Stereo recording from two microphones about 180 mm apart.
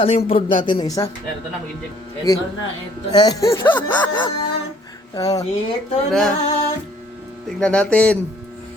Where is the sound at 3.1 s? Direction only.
20° left (ahead or behind).